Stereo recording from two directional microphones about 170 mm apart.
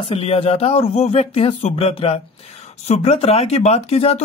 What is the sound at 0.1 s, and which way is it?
Speech, 35° left (ahead or behind).